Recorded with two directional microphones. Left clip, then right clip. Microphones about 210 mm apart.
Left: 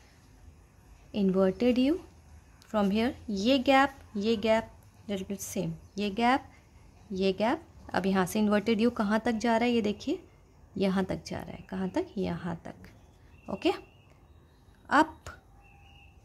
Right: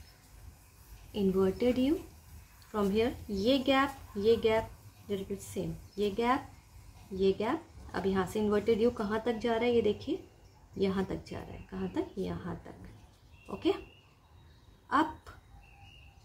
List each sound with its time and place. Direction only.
1.1 s a woman's voice: 40° left (ahead or behind)
13.6 s a woman's voice: 50° left (ahead or behind)
14.9 s speech: 50° left (ahead or behind)